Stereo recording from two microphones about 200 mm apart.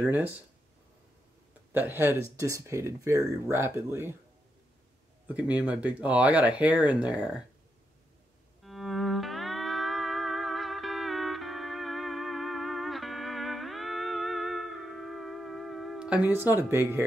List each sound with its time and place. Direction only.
0.0 s speech: 10° right (ahead or behind)
1.7 s speech: 10° right (ahead or behind)
5.3 s speech: 5° right (ahead or behind)
8.6 s music: centre (ahead or behind)